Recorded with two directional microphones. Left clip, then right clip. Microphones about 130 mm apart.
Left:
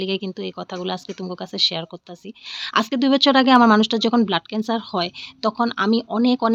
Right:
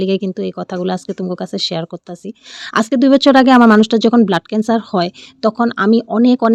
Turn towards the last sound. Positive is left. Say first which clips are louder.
# right 6 dB
turn(degrees=-70)  # may be behind; listen again after turning